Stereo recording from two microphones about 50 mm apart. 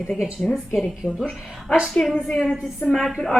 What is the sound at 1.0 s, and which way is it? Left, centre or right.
Speech, centre.